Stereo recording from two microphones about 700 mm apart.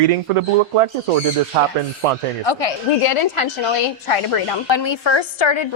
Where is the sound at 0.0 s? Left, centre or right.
Right.